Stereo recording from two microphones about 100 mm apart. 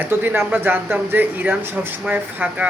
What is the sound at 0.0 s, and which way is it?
Speech, 20° right (ahead or behind).